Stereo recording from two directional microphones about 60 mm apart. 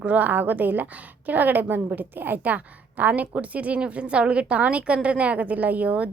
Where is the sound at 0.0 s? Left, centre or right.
Right.